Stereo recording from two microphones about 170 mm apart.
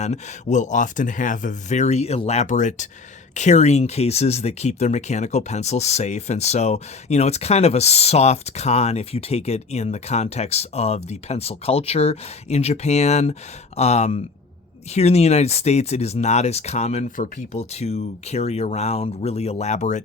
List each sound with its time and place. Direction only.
0.0 s speech: 45° left (ahead or behind)